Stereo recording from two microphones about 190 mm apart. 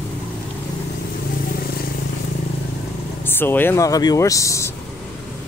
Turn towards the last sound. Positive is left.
turn(degrees=15)  # may be behind; listen again after turning